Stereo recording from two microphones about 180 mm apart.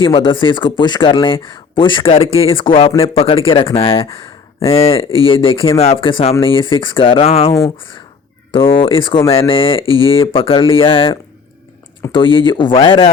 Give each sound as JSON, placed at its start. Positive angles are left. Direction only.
{"t": 0.0, "sound": "speech", "side_deg": 25}
{"t": 7.5, "sound": "speech", "side_deg": 20}
{"t": 8.8, "sound": "speech", "side_deg": 30}